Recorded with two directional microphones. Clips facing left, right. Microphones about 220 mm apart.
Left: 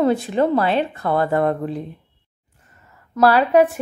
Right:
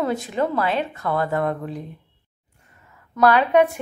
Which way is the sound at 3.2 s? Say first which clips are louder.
Left 2 dB; 35° left (ahead or behind).